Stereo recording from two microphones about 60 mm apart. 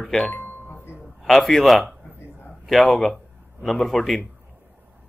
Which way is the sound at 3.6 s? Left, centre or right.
Centre.